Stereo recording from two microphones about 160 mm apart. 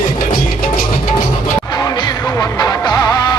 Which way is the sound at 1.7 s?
25° left (ahead or behind).